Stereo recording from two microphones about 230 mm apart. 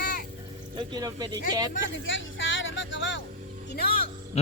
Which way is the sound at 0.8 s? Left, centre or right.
Centre.